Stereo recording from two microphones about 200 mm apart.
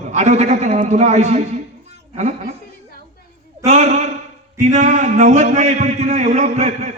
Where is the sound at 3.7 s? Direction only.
35° right (ahead or behind).